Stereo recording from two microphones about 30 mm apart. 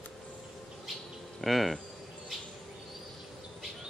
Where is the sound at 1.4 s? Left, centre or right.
Centre.